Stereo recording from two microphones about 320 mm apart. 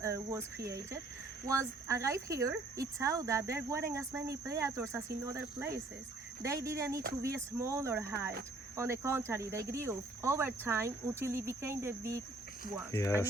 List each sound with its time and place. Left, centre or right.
0.0 s cricket: centre
1.5 s speech: centre
12.9 s speech: centre